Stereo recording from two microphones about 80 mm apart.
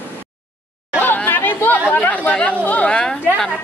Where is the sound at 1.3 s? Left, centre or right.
Left.